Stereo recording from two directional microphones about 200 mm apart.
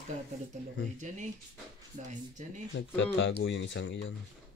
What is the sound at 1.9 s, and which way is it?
Speech, 40° right (ahead or behind).